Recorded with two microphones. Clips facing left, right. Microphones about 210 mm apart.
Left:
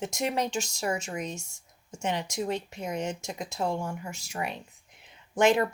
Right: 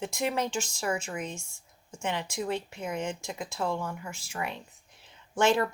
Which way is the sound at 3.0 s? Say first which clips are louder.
Left 1 dB; 40° left (ahead or behind).